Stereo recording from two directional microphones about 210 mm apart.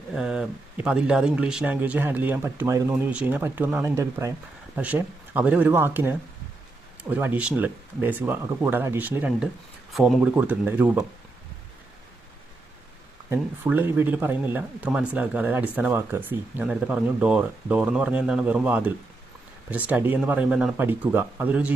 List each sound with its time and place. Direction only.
0.1 s speech: 5° right (ahead or behind)
13.3 s speech: 10° right (ahead or behind)